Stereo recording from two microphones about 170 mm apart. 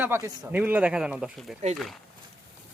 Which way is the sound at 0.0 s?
10° right (ahead or behind).